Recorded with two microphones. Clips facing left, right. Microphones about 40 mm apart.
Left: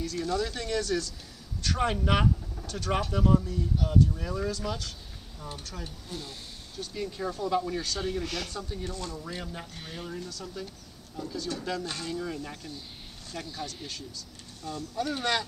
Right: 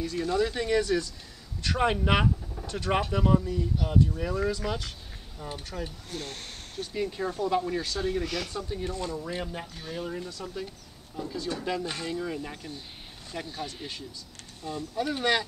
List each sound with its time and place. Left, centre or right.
0.0 s speech: right
6.1 s speech: right
6.8 s speech: centre
8.2 s speech: centre
8.5 s speech: centre